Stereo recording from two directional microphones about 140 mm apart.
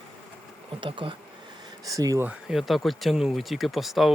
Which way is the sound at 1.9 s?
25° right (ahead or behind).